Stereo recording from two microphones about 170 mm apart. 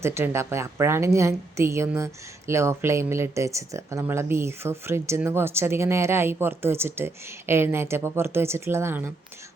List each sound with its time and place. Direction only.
0.0 s speech: 15° right (ahead or behind)